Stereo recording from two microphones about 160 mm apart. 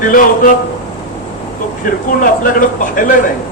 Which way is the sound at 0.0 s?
60° left (ahead or behind).